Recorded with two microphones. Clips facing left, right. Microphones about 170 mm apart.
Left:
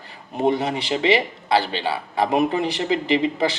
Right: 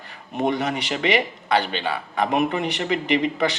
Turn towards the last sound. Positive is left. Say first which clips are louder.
# left 1 dB
turn(degrees=30)  # may be behind; listen again after turning